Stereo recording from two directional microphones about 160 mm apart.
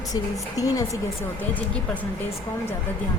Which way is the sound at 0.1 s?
20° left (ahead or behind).